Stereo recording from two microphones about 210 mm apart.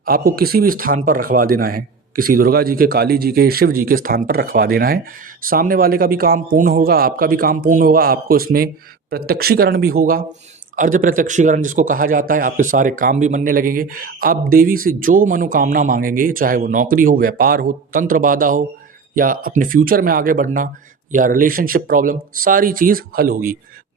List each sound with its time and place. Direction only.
0.0 s a man's voice: 45° right (ahead or behind)